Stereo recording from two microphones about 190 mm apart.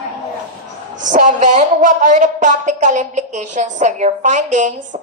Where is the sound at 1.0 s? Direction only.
40° right (ahead or behind).